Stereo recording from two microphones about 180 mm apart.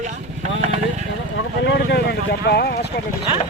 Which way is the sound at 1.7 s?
65° left (ahead or behind).